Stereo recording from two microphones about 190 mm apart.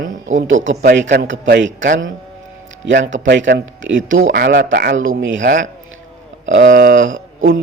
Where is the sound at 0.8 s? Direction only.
65° right (ahead or behind).